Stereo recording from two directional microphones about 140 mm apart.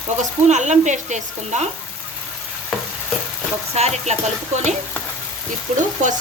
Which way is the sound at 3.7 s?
50° right (ahead or behind).